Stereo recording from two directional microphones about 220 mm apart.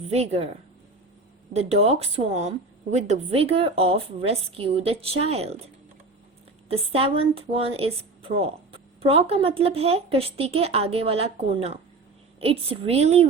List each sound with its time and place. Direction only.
0.0 s a woman's voice: 30° right (ahead or behind)
1.5 s a woman's voice: 30° right (ahead or behind)